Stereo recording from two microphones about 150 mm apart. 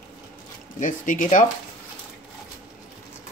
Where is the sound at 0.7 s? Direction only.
60° left (ahead or behind).